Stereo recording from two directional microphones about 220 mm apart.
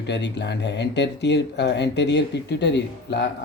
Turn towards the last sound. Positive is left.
turn(degrees=50)  # may be behind; listen again after turning